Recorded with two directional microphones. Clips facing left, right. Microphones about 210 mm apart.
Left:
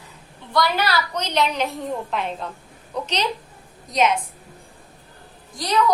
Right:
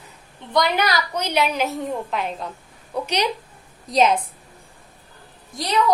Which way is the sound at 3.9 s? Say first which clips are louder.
Right 2 dB; 35° right (ahead or behind).